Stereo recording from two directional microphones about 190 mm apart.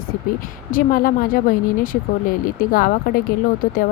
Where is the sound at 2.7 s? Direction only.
50° left (ahead or behind).